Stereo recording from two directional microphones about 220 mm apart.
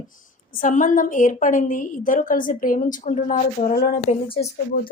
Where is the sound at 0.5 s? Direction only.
35° left (ahead or behind).